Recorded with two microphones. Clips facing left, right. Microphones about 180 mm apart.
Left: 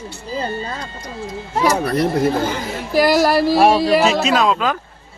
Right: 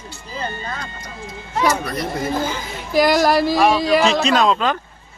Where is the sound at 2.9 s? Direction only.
5° left (ahead or behind).